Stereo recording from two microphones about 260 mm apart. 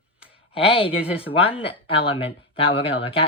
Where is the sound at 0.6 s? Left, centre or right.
Left.